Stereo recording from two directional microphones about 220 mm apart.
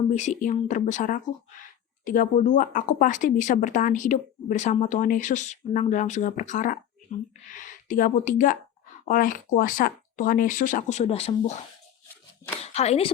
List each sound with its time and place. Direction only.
0.1 s speech: 35° left (ahead or behind)
12.6 s a woman's voice: 30° left (ahead or behind)